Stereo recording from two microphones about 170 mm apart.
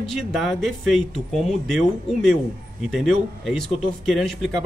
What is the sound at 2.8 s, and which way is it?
Speech, centre (ahead or behind).